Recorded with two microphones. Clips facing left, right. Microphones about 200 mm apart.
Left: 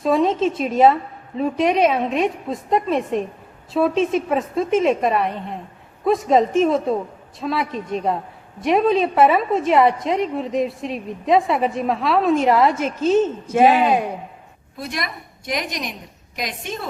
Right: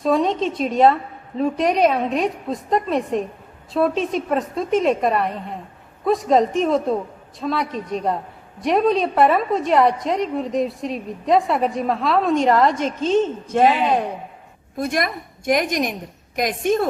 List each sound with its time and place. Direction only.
0.0 s a woman's voice: centre (ahead or behind)
14.8 s a woman's voice: 50° right (ahead or behind)